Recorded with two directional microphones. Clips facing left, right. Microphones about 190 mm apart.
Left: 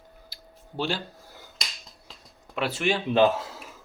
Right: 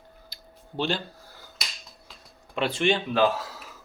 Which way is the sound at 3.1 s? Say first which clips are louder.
Left 2 dB; 25° left (ahead or behind).